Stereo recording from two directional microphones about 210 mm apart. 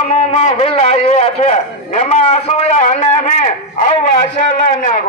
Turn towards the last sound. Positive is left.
turn(degrees=35)  # may be behind; listen again after turning